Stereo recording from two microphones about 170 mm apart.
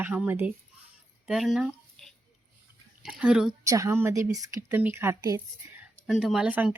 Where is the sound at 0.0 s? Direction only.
10° right (ahead or behind).